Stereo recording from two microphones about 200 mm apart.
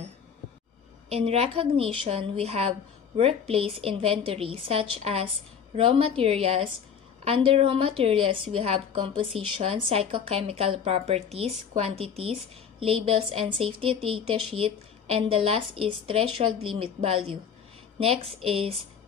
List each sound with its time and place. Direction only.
1.0 s a woman's voice: 30° right (ahead or behind)
17.9 s a woman's voice: 30° right (ahead or behind)